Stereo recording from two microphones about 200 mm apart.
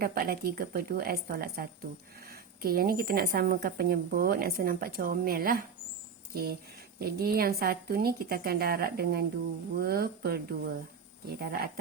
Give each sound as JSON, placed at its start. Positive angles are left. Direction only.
{"t": 0.0, "sound": "a woman's voice", "side_deg": -50}